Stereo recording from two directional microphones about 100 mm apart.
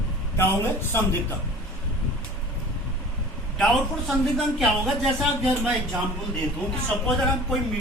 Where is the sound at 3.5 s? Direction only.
Centre (ahead or behind).